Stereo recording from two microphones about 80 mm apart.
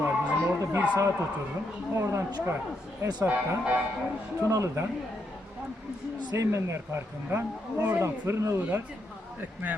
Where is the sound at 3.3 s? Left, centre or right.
Centre.